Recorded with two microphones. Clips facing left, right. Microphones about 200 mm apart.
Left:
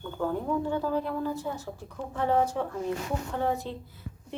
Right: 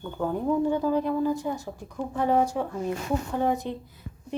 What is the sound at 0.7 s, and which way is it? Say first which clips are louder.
Speech: right 4 dB; 15° right (ahead or behind).